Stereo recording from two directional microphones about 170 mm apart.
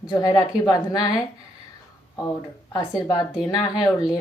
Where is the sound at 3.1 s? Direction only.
25° left (ahead or behind).